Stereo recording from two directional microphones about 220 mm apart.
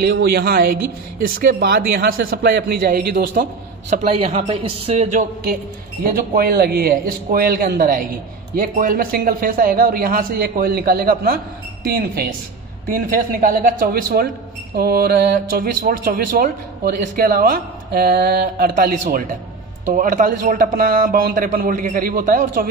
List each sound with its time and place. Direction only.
0.0 s a man's voice: 45° right (ahead or behind)
3.9 s speech: 30° right (ahead or behind)
6.0 s a man's voice: 40° right (ahead or behind)